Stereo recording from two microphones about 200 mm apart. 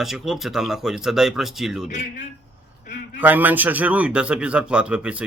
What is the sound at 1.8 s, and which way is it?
Speech, 40° left (ahead or behind).